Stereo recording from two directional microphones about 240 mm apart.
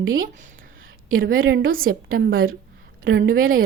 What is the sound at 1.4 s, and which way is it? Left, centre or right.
Speech, right.